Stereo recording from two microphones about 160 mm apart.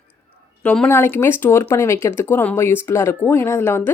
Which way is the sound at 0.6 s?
5° left (ahead or behind).